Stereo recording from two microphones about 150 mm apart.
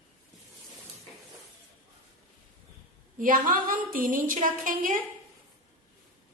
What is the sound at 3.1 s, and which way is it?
A woman's voice, 65° right (ahead or behind).